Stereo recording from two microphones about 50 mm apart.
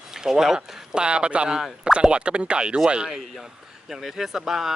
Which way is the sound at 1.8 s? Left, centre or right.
Centre.